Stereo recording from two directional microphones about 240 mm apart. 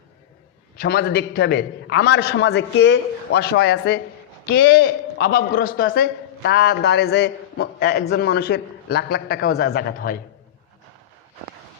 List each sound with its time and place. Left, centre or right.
0.8 s a man's voice: left